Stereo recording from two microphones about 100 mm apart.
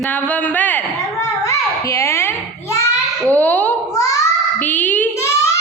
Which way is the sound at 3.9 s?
35° left (ahead or behind).